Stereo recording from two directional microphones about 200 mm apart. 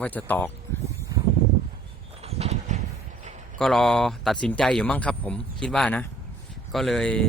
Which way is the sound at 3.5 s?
Centre (ahead or behind).